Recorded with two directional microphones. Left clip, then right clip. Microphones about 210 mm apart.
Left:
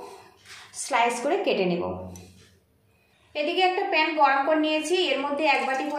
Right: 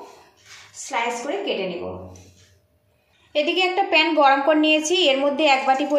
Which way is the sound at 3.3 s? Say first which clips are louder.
Right 3 dB; 40° right (ahead or behind).